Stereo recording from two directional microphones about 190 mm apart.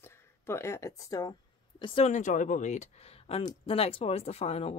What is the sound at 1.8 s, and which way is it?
Speech, 35° left (ahead or behind).